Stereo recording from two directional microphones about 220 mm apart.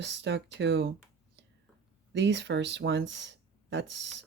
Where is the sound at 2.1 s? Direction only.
55° right (ahead or behind).